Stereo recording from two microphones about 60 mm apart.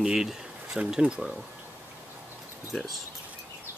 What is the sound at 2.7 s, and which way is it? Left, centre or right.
Speech, centre.